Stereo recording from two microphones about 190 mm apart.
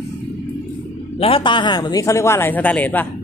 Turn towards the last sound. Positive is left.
turn(degrees=10)  # may be behind; listen again after turning